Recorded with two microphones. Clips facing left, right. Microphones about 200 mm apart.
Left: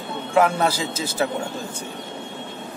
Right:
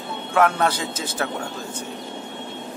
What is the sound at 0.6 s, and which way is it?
Speech, 10° left (ahead or behind).